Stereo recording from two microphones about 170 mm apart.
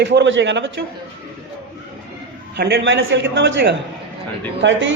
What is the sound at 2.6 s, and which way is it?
A man's voice, 75° right (ahead or behind).